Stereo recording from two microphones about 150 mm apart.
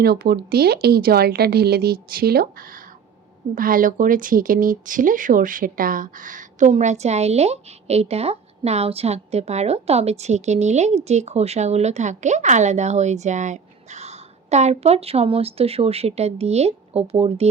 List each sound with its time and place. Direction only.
0.0 s speech: 90° right; by 17.5 s 40° right (ahead or behind)